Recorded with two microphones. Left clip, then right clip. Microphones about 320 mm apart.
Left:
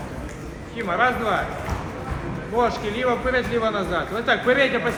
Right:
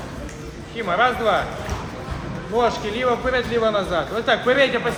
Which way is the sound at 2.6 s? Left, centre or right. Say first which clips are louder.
Right 2 dB; right.